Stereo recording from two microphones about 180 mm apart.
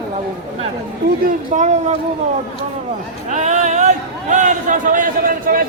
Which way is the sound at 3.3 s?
40° right (ahead or behind).